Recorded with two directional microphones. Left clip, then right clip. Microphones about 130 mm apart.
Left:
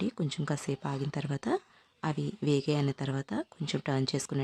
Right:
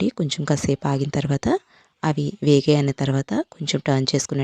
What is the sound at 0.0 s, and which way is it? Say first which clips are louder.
Speech: right 11 dB; 50° right (ahead or behind).